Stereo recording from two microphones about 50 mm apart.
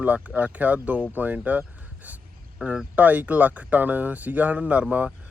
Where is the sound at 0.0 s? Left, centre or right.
Right.